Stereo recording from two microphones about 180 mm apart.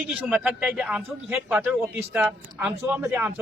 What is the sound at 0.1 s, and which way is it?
A man's voice, 5° right (ahead or behind).